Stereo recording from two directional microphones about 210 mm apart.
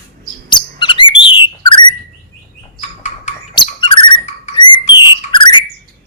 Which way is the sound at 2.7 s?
30° left (ahead or behind).